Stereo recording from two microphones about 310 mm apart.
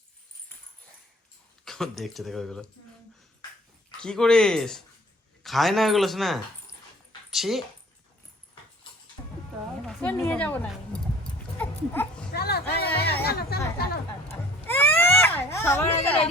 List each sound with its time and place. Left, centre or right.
1.6 s speech: centre
4.0 s speech: centre
9.8 s dog: centre
12.3 s speech: left
14.7 s baby cry: centre